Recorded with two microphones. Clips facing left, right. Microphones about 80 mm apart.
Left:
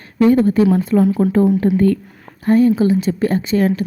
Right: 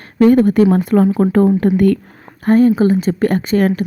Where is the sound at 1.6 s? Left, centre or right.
Right.